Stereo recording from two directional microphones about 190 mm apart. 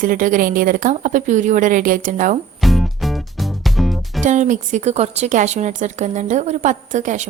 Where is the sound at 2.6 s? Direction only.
Centre (ahead or behind).